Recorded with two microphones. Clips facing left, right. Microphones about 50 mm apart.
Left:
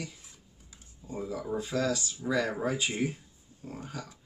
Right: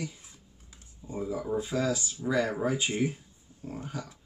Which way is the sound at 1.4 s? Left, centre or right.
Centre.